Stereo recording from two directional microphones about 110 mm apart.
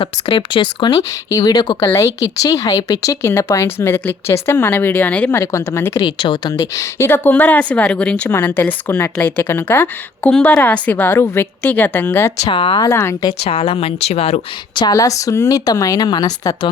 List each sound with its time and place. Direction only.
0.0 s speech: 55° left (ahead or behind)
1.3 s speech: 35° left (ahead or behind)
1.9 s speech: 30° left (ahead or behind); by 5.4 s 15° left (ahead or behind)
5.4 s speech: 25° left (ahead or behind)
6.1 s speech: 45° left (ahead or behind); by 12.3 s 20° left (ahead or behind)
12.5 s speech: 50° left (ahead or behind)
12.8 s speech: 25° left (ahead or behind)
13.4 s speech: 65° left (ahead or behind)
14.8 s speech: 35° left (ahead or behind)